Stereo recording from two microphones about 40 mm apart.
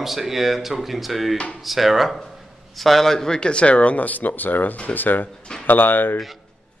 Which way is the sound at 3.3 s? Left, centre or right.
Left.